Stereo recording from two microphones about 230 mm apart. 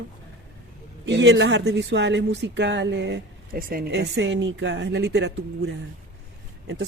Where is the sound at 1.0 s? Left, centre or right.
Right.